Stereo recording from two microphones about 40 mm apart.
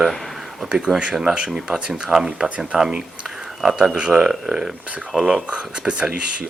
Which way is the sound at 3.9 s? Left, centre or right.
Right.